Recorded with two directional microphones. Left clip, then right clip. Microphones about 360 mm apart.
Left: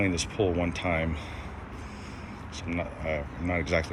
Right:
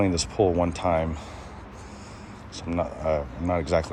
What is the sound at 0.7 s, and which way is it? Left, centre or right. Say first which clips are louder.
Speech: right 5 dB; centre.